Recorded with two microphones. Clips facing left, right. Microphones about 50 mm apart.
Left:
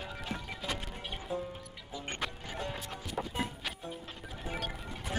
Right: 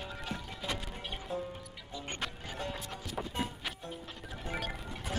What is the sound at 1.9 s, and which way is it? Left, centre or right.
Music, left.